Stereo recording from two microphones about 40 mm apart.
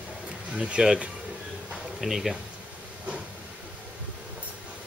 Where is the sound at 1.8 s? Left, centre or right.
Centre.